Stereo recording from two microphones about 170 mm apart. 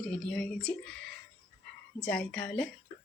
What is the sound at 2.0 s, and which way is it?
Speech, 5° left (ahead or behind).